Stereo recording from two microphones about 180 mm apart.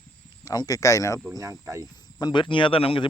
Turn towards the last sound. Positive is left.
turn(degrees=30)  # may be behind; listen again after turning